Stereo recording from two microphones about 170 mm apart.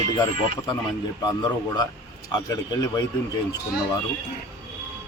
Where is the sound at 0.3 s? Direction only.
30° left (ahead or behind).